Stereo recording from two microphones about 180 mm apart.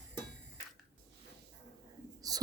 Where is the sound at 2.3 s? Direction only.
20° right (ahead or behind).